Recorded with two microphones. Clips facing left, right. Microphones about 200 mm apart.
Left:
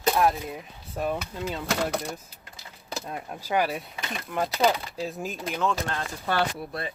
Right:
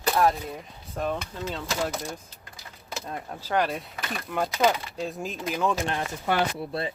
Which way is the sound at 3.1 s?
10° left (ahead or behind).